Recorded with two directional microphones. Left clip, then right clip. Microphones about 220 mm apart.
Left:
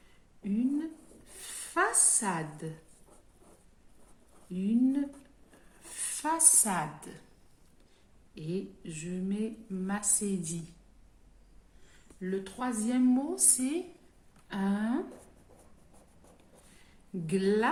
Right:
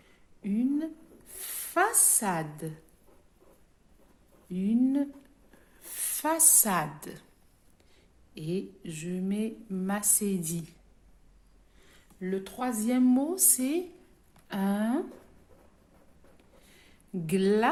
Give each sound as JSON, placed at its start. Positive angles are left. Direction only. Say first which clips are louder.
{"t": 1.4, "sound": "a sound", "louder": "right 3 dB", "side_deg": -35}
{"t": 4.5, "sound": "a woman's voice", "louder": "right 2 dB", "side_deg": -35}
{"t": 8.4, "sound": "a woman's voice", "louder": "right 3 dB", "side_deg": -40}
{"t": 12.2, "sound": "a woman's voice", "louder": "right 2 dB", "side_deg": -35}
{"t": 17.2, "sound": "a woman's voice", "louder": "right 3 dB", "side_deg": -40}